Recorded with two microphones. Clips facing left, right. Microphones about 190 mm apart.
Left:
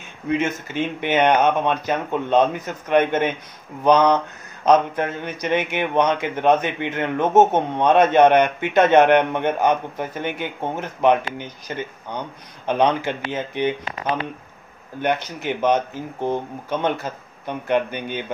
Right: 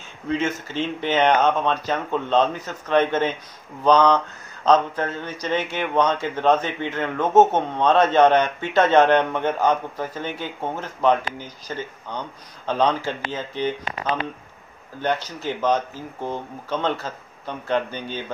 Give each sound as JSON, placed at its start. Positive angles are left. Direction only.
{"t": 0.3, "sound": "a man's voice", "side_deg": 15}
{"t": 15.0, "sound": "a man's voice", "side_deg": 20}